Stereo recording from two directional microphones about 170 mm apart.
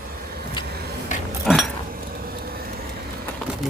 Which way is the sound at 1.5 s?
5° left (ahead or behind).